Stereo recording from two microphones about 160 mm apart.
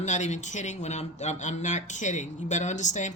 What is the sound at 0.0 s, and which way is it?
Speech, 50° left (ahead or behind).